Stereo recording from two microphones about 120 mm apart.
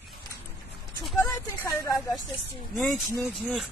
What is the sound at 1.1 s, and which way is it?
Speech, 25° left (ahead or behind).